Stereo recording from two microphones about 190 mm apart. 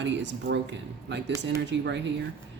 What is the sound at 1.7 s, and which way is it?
Speech, 70° right (ahead or behind).